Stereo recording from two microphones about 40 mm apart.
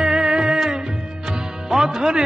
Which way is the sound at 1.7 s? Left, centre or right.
Centre.